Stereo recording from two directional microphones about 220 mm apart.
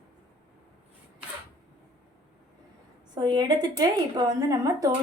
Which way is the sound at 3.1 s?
20° right (ahead or behind).